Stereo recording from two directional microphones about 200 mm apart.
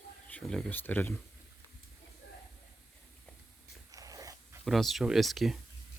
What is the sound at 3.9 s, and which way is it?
Dog, 15° right (ahead or behind).